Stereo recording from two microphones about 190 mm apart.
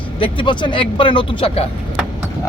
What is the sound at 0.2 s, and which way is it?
Speech, 25° left (ahead or behind).